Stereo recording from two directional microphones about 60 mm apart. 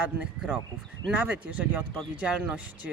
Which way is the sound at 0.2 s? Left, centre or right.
Centre.